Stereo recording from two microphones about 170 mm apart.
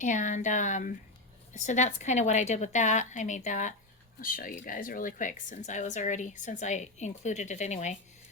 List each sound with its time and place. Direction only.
0.0 s speech: 45° left (ahead or behind)